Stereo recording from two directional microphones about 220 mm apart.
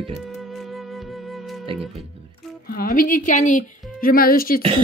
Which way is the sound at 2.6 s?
40° left (ahead or behind).